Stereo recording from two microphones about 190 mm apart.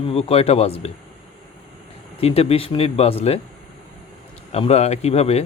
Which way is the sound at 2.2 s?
30° left (ahead or behind).